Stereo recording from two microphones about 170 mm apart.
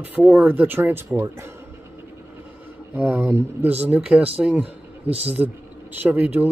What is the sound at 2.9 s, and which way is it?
A man's voice, 10° right (ahead or behind).